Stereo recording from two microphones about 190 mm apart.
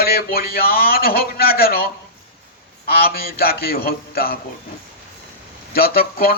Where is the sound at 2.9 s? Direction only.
50° left (ahead or behind).